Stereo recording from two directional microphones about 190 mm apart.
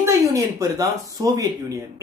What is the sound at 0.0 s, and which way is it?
Speech, 15° right (ahead or behind).